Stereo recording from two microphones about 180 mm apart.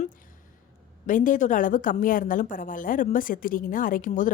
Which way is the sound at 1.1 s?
45° left (ahead or behind).